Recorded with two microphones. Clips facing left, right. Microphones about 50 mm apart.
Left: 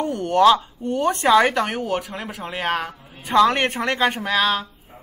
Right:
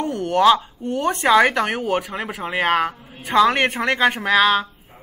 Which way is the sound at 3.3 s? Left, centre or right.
Centre.